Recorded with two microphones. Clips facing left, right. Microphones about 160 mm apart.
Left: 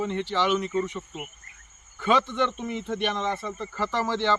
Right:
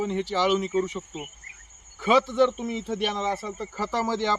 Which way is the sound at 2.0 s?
10° right (ahead or behind).